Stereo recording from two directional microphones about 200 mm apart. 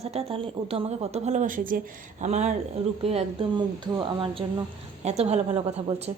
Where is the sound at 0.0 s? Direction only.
30° right (ahead or behind).